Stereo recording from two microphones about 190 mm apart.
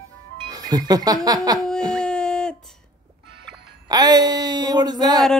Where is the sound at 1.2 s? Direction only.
20° right (ahead or behind).